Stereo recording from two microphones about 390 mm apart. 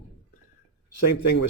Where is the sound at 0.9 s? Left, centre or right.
Left.